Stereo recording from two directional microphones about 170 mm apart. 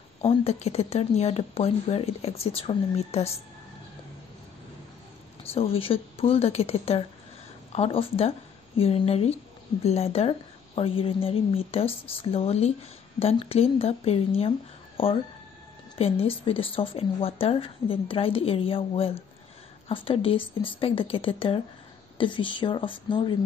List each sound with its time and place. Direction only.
0.2 s speech: 35° left (ahead or behind)
5.4 s a woman's voice: 35° left (ahead or behind)